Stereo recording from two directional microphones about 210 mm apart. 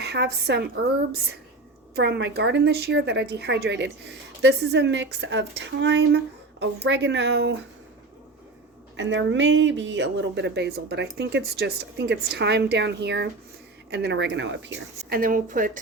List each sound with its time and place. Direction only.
0.0 s speech: 50° right (ahead or behind)
2.0 s a woman's voice: 55° right (ahead or behind)
9.0 s a woman's voice: 60° right (ahead or behind)
15.2 s speech: 40° right (ahead or behind)